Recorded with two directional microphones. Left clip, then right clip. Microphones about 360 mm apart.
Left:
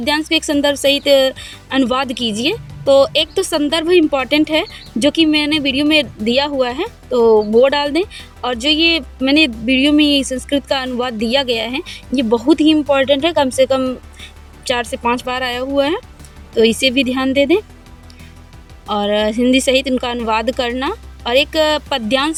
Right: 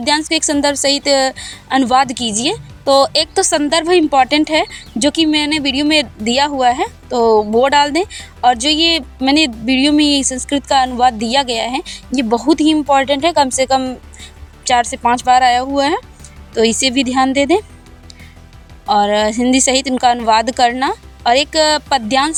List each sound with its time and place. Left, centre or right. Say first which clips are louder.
0.0 s a woman's voice: right 1 dB; right
2.1 s speech: even; right
2.5 s a woman's voice: left 1 dB; right
18.9 s a woman's voice: right 4 dB; right